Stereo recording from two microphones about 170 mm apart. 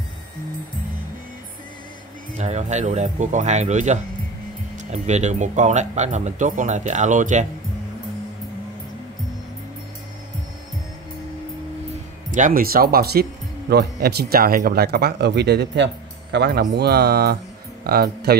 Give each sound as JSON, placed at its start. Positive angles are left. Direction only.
{"t": 2.3, "sound": "speech", "side_deg": -45}
{"t": 12.3, "sound": "speech", "side_deg": -50}
{"t": 16.7, "sound": "speech", "side_deg": -70}